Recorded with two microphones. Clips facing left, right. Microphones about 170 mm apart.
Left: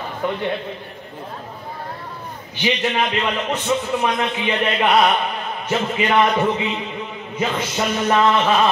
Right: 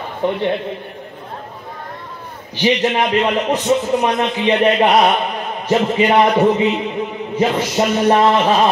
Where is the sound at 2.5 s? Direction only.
40° right (ahead or behind).